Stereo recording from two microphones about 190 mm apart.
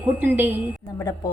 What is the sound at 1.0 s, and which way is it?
Speech, 20° left (ahead or behind).